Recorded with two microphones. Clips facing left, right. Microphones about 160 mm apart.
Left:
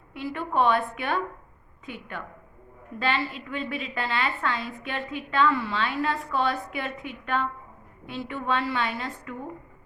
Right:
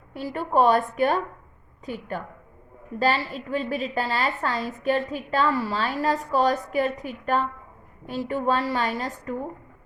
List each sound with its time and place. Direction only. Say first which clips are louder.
0.1 s a woman's voice: right 4 dB; 40° right (ahead or behind)